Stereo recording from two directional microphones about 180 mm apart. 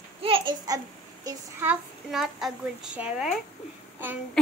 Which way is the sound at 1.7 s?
Centre (ahead or behind).